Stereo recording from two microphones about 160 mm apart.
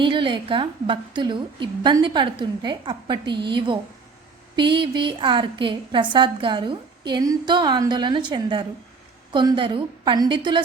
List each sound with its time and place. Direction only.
0.0 s a woman's voice: 30° right (ahead or behind)